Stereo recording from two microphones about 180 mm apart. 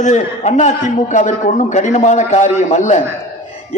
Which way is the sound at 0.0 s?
40° left (ahead or behind).